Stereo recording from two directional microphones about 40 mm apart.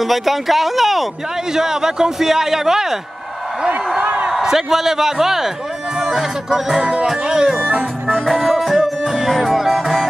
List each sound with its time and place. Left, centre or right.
0.0 s a man's voice: centre
4.0 s a sound: right
4.3 s a man's voice: centre
5.9 s music: centre
7.1 s a man's voice: centre
8.1 s music: centre